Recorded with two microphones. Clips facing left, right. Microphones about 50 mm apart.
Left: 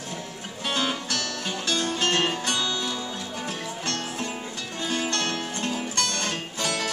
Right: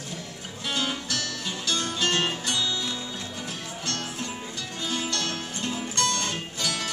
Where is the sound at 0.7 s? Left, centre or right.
Left.